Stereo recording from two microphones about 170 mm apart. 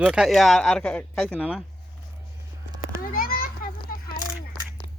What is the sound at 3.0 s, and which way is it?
Children playing, 60° left (ahead or behind).